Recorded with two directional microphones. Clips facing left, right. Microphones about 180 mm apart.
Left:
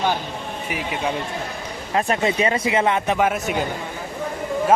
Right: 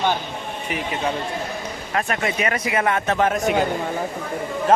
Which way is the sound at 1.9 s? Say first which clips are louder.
Left 4 dB; 25° left (ahead or behind).